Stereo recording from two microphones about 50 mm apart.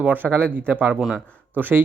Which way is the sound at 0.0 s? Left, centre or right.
Right.